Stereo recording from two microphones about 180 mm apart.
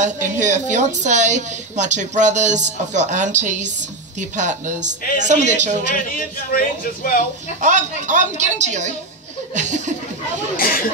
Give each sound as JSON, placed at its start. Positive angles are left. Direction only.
{"t": 0.0, "sound": "a woman's voice", "side_deg": -40}
{"t": 6.1, "sound": "a man's voice", "side_deg": 50}
{"t": 7.6, "sound": "a woman's voice", "side_deg": -40}
{"t": 9.5, "sound": "laughter", "side_deg": -40}
{"t": 10.6, "sound": "a man's voice", "side_deg": 50}